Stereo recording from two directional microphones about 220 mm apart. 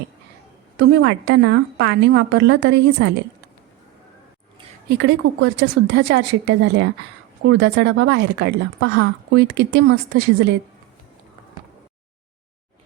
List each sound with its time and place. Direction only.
0.8 s speech: 50° right (ahead or behind)
4.9 s speech: 50° right (ahead or behind)